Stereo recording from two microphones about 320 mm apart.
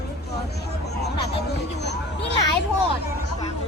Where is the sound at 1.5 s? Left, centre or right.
Left.